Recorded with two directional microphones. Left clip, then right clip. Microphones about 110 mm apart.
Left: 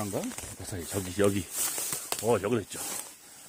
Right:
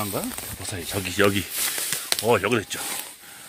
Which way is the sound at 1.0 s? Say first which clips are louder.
Right 6 dB; 30° left (ahead or behind).